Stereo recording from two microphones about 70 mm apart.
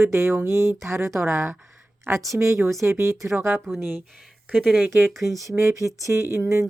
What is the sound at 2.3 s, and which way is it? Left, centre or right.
Speech, right.